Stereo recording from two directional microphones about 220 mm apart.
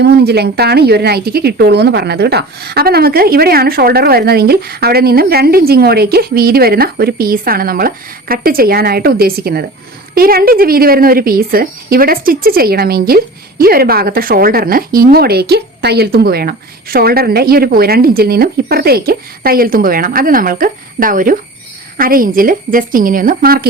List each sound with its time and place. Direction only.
0.0 s a woman's voice: 50° right (ahead or behind)